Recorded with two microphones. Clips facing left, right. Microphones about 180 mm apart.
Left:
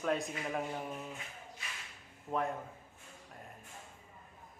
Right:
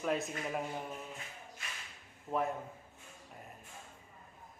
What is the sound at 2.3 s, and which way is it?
Speech, centre (ahead or behind).